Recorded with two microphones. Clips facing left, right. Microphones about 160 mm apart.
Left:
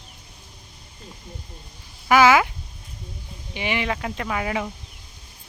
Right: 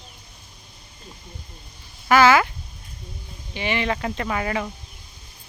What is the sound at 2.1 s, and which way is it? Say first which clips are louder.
Speech: even; 15° left (ahead or behind).